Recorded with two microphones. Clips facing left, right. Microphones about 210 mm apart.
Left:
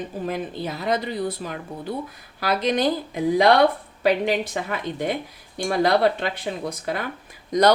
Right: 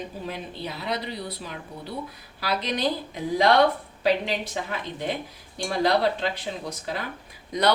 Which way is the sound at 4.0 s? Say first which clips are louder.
Left 4 dB; 50° left (ahead or behind).